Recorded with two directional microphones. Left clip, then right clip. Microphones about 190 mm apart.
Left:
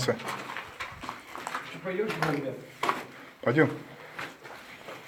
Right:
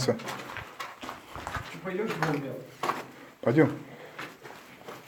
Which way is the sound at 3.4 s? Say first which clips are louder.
Right 1 dB; 25° right (ahead or behind).